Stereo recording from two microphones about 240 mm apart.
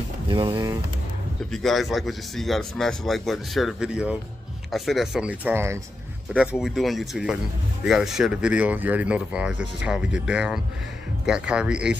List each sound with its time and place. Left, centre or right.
0.3 s speech: centre
1.5 s speech: centre